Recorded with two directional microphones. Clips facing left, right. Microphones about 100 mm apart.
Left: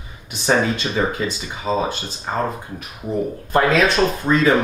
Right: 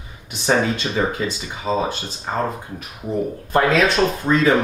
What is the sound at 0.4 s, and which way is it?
Speech, 15° left (ahead or behind).